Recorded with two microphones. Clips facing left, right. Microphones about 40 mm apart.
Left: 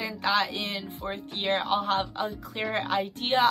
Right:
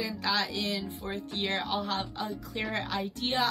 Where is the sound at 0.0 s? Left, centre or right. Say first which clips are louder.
Left 4 dB; left.